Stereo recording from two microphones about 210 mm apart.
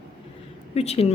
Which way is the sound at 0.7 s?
30° left (ahead or behind).